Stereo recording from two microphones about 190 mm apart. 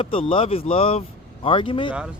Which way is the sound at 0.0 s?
30° left (ahead or behind).